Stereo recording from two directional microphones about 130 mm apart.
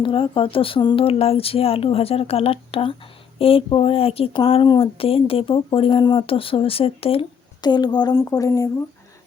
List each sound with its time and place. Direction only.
0.0 s speech: 40° left (ahead or behind)
7.6 s a woman's voice: 35° left (ahead or behind)
8.1 s speech: 20° left (ahead or behind)